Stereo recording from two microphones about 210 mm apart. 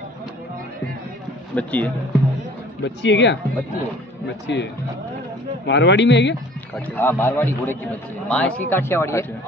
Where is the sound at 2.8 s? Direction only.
60° left (ahead or behind).